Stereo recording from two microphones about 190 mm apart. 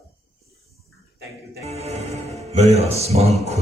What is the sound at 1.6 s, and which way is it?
Music, 35° right (ahead or behind).